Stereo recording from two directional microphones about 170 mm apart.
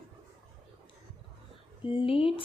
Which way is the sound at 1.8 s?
30° left (ahead or behind).